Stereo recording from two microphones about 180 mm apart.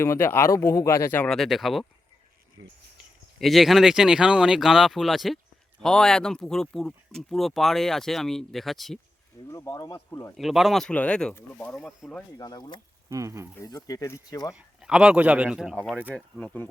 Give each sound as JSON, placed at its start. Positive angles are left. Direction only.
{"t": 0.0, "sound": "speech", "side_deg": 15}
{"t": 2.6, "sound": "speech", "side_deg": -90}
{"t": 3.3, "sound": "speech", "side_deg": 0}
{"t": 9.5, "sound": "speech", "side_deg": 20}
{"t": 10.3, "sound": "speech", "side_deg": 0}
{"t": 12.4, "sound": "speech", "side_deg": 25}
{"t": 13.1, "sound": "speech", "side_deg": -15}
{"t": 13.6, "sound": "speech", "side_deg": 20}
{"t": 14.5, "sound": "speech", "side_deg": -5}